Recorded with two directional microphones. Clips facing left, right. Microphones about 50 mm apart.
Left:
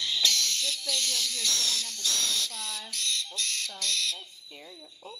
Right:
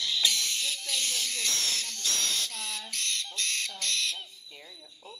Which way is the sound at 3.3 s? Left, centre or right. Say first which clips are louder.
Right 1 dB; right.